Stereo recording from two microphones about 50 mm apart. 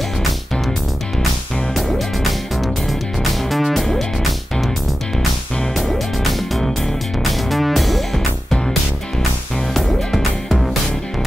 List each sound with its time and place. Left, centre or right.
1.8 s music: centre
5.8 s music: centre
9.8 s music: centre